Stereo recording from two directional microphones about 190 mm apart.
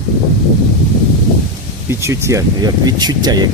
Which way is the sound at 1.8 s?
15° right (ahead or behind).